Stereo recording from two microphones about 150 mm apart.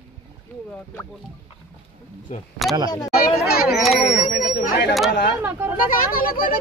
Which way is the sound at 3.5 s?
90° left.